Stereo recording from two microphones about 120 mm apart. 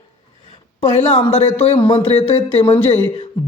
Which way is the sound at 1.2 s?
60° left (ahead or behind).